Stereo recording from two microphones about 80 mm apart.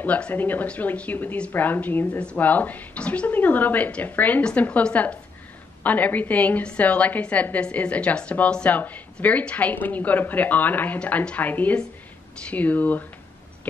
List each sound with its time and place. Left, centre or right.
0.0 s a woman's voice: centre